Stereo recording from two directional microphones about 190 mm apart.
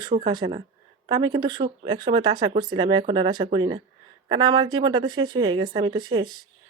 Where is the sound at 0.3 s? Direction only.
25° right (ahead or behind).